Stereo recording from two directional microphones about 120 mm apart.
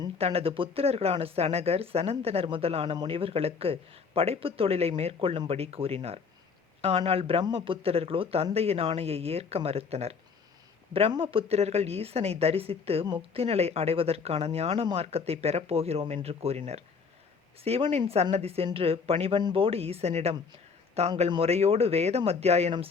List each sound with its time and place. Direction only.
0.2 s speech: 55° right (ahead or behind)
11.1 s speech: 45° right (ahead or behind); by 20.3 s 65° right (ahead or behind)
21.2 s speech: 50° right (ahead or behind)